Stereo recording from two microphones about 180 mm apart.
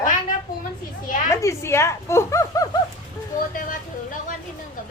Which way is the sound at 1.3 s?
15° left (ahead or behind).